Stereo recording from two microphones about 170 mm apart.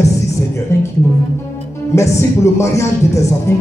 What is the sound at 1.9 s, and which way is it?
Speech, 15° left (ahead or behind).